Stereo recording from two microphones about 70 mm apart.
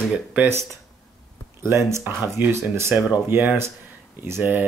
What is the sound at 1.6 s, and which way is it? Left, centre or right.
Speech, right.